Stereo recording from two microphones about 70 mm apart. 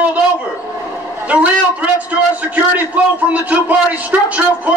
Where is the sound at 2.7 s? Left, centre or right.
Right.